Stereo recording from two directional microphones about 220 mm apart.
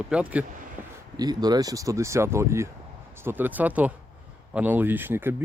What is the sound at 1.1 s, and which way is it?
Speech, 20° right (ahead or behind).